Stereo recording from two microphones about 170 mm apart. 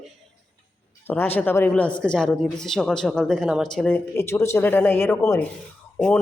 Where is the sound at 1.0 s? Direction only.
10° left (ahead or behind).